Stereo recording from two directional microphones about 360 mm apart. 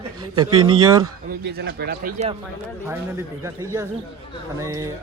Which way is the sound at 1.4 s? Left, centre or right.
Right.